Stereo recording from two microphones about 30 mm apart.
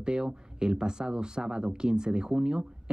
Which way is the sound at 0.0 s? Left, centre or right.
Right.